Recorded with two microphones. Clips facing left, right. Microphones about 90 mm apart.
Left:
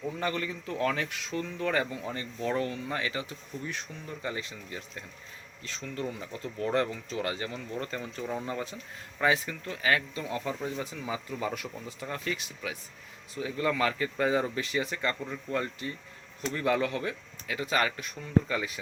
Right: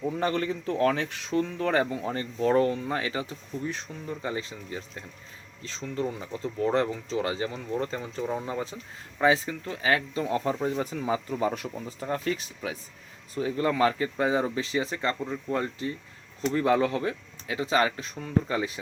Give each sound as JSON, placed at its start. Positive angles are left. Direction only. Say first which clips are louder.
{"t": 0.2, "sound": "speech", "louder": "right 5 dB", "side_deg": -35}